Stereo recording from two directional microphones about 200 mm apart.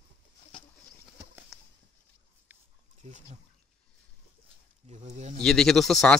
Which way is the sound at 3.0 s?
35° right (ahead or behind).